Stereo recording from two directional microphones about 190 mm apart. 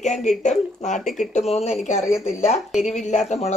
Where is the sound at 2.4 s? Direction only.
35° left (ahead or behind).